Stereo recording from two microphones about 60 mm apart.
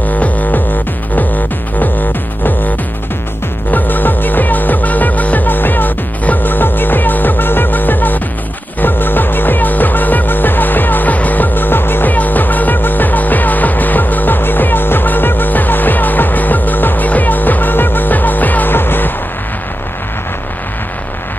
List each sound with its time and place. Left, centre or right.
0.0 s music: left
3.7 s music: left